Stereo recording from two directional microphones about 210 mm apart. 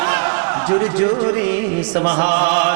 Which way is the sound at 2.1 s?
20° right (ahead or behind).